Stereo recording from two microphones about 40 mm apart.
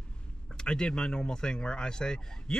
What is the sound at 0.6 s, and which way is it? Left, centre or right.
A man's voice, left.